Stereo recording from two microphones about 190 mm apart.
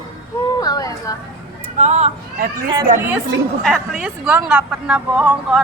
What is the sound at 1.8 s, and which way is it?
Speech, 35° right (ahead or behind).